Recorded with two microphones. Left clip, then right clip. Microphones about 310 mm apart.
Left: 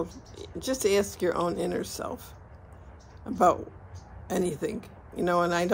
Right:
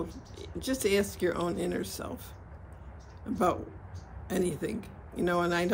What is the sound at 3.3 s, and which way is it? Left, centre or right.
Speech, centre.